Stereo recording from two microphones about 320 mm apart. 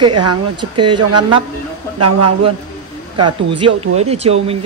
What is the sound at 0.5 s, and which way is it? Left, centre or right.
Speech, centre.